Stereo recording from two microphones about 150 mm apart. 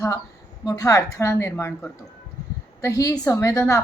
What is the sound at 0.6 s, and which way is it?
A woman's voice, 25° left (ahead or behind).